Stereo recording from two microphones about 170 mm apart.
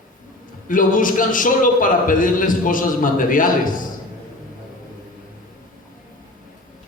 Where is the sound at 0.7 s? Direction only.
50° left (ahead or behind).